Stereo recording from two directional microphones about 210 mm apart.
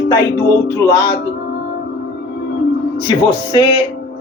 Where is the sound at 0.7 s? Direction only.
15° left (ahead or behind).